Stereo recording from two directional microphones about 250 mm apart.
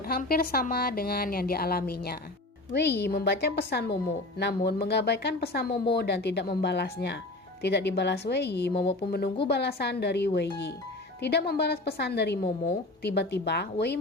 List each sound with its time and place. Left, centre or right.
0.1 s speech: left